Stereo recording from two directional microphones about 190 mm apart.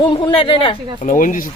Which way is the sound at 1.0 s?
45° left (ahead or behind).